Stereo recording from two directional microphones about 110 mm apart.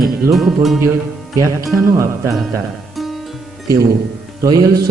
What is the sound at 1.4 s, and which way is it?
Speech, 30° right (ahead or behind).